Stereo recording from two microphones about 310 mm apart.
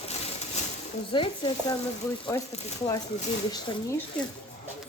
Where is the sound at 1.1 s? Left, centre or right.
Centre.